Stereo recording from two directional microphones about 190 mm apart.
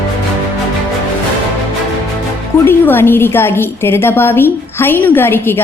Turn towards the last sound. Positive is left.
turn(degrees=10)  # may be behind; listen again after turning